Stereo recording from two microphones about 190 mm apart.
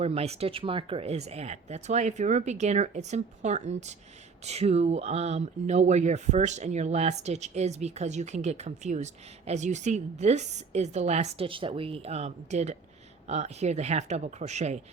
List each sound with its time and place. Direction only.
0.0 s speech: 35° right (ahead or behind)